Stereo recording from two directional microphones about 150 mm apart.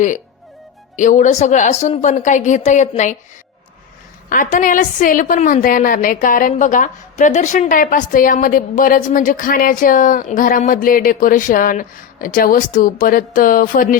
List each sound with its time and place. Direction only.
0.9 s a woman's voice: 55° left (ahead or behind)
4.3 s a woman's voice: 60° left (ahead or behind)